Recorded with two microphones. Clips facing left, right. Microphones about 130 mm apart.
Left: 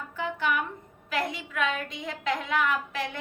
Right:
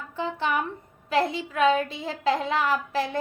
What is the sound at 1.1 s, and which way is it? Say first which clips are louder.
A woman's voice: right 6 dB; 30° right (ahead or behind).